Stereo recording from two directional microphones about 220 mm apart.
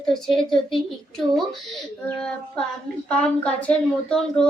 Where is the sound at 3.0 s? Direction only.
5° left (ahead or behind).